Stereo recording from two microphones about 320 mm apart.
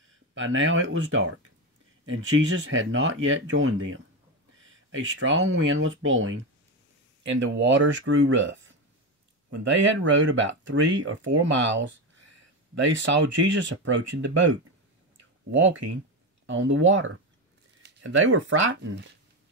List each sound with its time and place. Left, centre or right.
0.3 s speech: right
2.0 s speech: right
16.4 s speech: right